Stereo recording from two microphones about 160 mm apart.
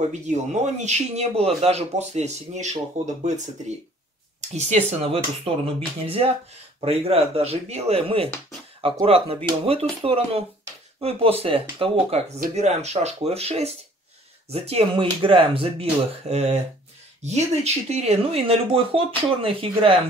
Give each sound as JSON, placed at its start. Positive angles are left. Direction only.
{"t": 0.1, "sound": "speech", "side_deg": -45}
{"t": 4.4, "sound": "speech", "side_deg": -45}